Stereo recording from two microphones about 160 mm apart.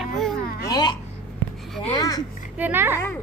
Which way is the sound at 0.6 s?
25° left (ahead or behind).